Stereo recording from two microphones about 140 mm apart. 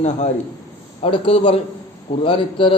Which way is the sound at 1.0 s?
40° left (ahead or behind).